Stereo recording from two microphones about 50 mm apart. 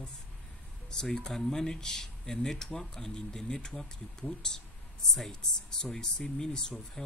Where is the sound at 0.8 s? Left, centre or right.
Centre.